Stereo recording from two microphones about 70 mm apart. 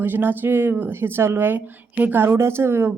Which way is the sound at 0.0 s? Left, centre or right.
Right.